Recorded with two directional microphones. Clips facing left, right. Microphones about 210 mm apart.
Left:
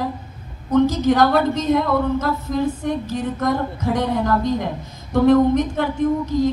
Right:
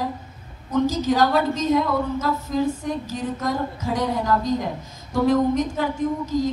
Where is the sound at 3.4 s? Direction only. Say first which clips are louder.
Left 6 dB; 60° left (ahead or behind).